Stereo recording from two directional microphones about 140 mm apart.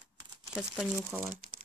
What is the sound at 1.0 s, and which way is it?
Speech, 20° right (ahead or behind).